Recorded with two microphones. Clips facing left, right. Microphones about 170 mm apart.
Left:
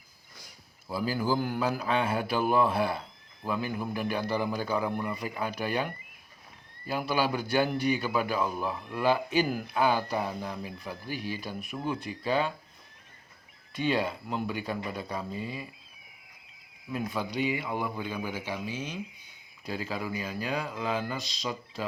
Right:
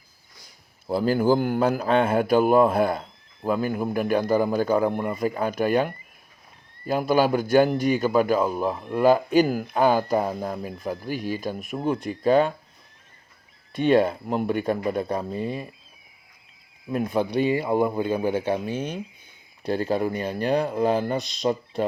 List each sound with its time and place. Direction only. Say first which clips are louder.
0.9 s a man's voice: right 9 dB; 55° right (ahead or behind)
13.7 s a man's voice: right 9 dB; 55° right (ahead or behind)
16.9 s speech: right 9 dB; 55° right (ahead or behind)
17.7 s speech: right 10 dB; 45° right (ahead or behind); by 20.2 s 60° right (ahead or behind)
20.2 s speech: right 9 dB; 35° right (ahead or behind)
21.2 s speech: right 11 dB; 55° right (ahead or behind)